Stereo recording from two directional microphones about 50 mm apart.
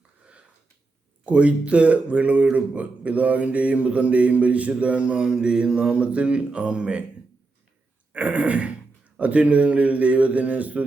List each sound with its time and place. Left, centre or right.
1.2 s speech: right
8.1 s speech: right